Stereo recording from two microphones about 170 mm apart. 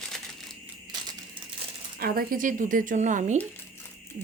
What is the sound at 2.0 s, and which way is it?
Speech, 60° right (ahead or behind).